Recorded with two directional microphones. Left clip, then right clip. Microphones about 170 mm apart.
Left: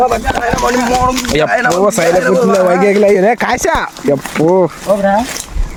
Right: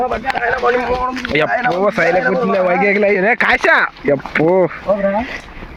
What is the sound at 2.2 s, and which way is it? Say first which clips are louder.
Speech: left 5 dB; 40° left (ahead or behind).